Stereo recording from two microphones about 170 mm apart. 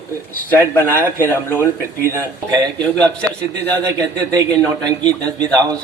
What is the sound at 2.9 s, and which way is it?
Speech, 5° left (ahead or behind).